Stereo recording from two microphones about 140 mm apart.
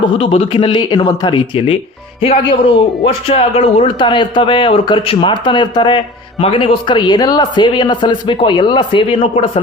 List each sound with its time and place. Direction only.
0.0 s a man's voice: 40° left (ahead or behind)
2.2 s a man's voice: 45° left (ahead or behind)